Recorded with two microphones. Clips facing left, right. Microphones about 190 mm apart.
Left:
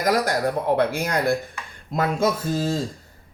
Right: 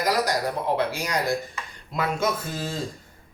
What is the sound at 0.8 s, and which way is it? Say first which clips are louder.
Speech: left 4 dB; 55° left (ahead or behind).